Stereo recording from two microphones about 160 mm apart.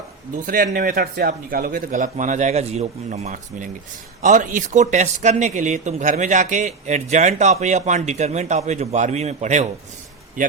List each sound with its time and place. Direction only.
0.4 s speech: 55° right (ahead or behind)